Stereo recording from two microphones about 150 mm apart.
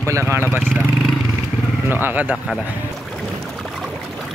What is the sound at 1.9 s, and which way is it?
Speech, 15° right (ahead or behind).